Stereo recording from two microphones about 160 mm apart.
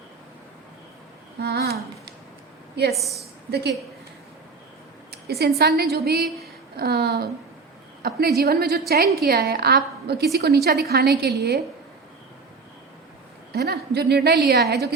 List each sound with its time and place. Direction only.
1.4 s a sound: 90° right
2.9 s a woman's voice: centre (ahead or behind)
3.5 s a woman's voice: 90° right
5.1 s a woman's voice: 80° right
6.7 s a woman's voice: 90° right
8.4 s a woman's voice: 75° right (ahead or behind)
13.5 s a woman's voice: 90° right